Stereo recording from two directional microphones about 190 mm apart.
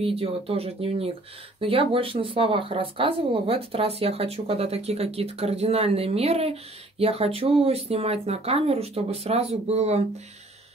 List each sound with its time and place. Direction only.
0.0 s speech: 30° right (ahead or behind)